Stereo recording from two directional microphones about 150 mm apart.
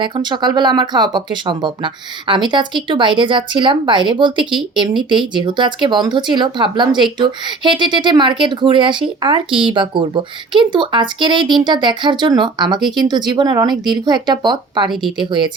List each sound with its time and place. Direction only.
0.0 s speech: 30° right (ahead or behind)